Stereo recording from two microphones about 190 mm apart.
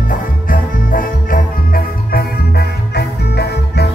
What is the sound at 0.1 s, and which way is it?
Music, 50° left (ahead or behind).